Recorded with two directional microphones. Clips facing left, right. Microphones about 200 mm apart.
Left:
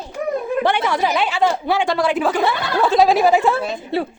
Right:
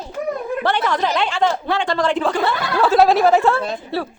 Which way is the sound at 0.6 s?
10° left (ahead or behind).